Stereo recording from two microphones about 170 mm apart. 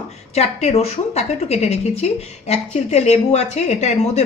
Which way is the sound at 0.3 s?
40° left (ahead or behind).